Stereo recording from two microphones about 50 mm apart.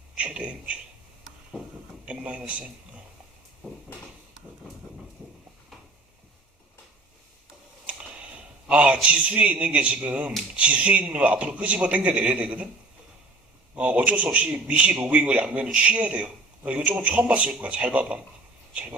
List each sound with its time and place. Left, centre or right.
0.2 s a man's voice: right
2.0 s speech: right
8.7 s a man's voice: right
13.7 s a man's voice: right